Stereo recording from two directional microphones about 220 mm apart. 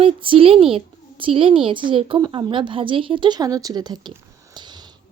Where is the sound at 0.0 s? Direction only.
25° right (ahead or behind).